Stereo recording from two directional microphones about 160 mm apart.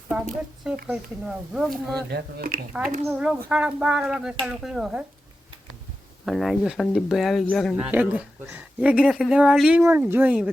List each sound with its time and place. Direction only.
0.1 s speech: 5° right (ahead or behind)
2.0 s speech: 75° right (ahead or behind)
3.0 s speech: 10° right (ahead or behind)
6.2 s speech: centre (ahead or behind)
7.9 s speech: 10° right (ahead or behind)